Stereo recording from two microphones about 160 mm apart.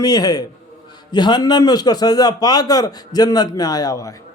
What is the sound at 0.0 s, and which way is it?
Speech, 25° left (ahead or behind).